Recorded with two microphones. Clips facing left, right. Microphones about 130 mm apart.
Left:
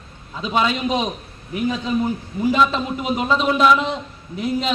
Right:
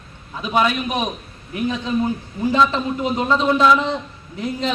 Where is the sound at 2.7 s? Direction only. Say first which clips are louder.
Right 1 dB; 15° left (ahead or behind).